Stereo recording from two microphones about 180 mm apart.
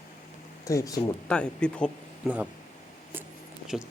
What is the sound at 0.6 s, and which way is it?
Speech, 15° left (ahead or behind).